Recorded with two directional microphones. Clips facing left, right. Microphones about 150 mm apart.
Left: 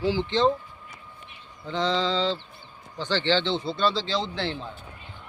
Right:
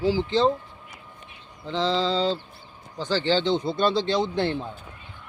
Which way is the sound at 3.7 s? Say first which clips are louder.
Right 3 dB; 50° right (ahead or behind).